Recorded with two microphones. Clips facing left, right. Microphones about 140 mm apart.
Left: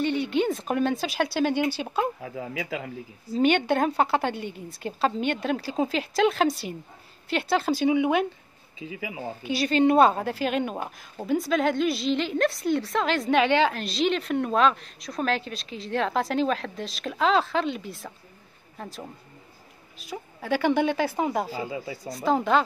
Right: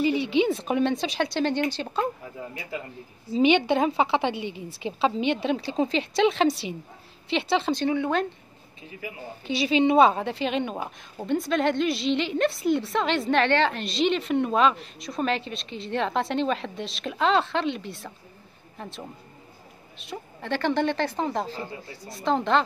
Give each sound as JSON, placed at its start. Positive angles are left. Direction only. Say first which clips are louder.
{"t": 0.0, "sound": "a woman's voice", "louder": "right 2 dB", "side_deg": 0}
{"t": 2.2, "sound": "speech", "louder": "left 5 dB", "side_deg": 90}
{"t": 3.3, "sound": "a woman's voice", "louder": "right 1 dB", "side_deg": 0}
{"t": 9.4, "sound": "a woman's voice", "louder": "even", "side_deg": 0}